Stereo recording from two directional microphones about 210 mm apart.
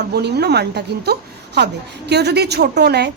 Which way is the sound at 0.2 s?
50° right (ahead or behind).